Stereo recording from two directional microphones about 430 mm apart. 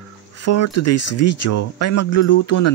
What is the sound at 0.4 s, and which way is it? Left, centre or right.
Speech, left.